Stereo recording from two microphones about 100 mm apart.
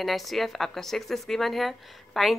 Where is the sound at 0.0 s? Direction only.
Centre (ahead or behind).